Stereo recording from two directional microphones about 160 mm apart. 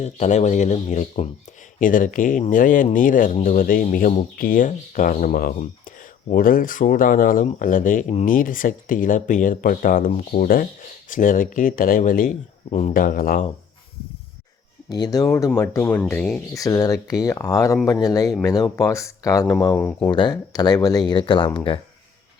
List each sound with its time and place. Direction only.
0.0 s speech: 45° left (ahead or behind); by 13.4 s 65° left (ahead or behind)
14.8 s speech: 25° left (ahead or behind); by 16.4 s 10° left (ahead or behind)
16.6 s speech: 20° left (ahead or behind)